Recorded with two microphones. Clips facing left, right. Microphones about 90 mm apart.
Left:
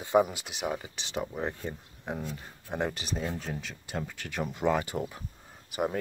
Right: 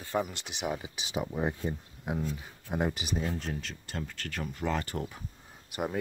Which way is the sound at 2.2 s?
Centre (ahead or behind).